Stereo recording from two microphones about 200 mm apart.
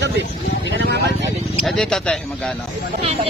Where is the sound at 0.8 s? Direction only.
55° right (ahead or behind).